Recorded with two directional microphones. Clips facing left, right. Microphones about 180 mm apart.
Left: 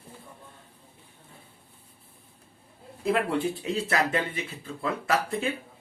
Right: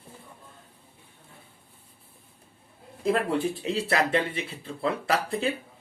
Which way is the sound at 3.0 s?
35° right (ahead or behind).